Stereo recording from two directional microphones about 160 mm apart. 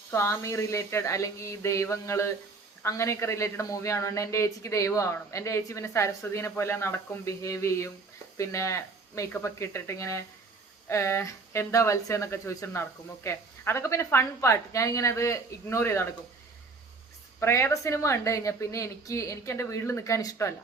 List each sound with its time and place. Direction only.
0.1 s a man's voice: 15° left (ahead or behind)
17.4 s a man's voice: 15° left (ahead or behind)